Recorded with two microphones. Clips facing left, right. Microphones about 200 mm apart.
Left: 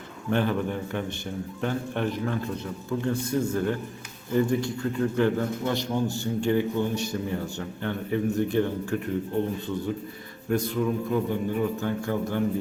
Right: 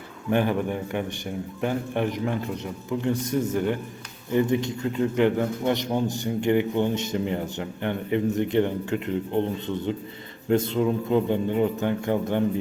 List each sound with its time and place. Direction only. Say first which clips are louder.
0.3 s a man's voice: right 2 dB; 15° right (ahead or behind)